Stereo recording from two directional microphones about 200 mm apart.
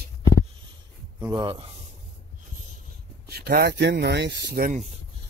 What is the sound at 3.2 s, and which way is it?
Speech, 50° right (ahead or behind).